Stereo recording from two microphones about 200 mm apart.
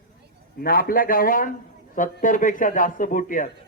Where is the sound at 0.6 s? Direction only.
45° left (ahead or behind).